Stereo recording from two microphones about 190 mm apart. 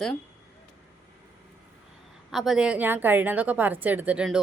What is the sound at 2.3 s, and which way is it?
Speech, centre (ahead or behind).